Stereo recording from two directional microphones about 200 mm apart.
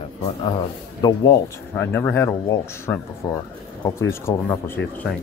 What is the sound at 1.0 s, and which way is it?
Speech, 20° left (ahead or behind).